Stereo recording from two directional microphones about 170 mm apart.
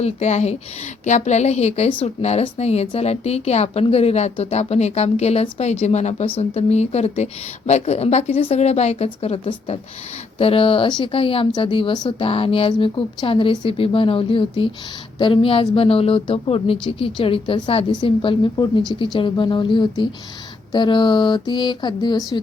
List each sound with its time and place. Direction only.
0.0 s a woman's voice: 40° left (ahead or behind)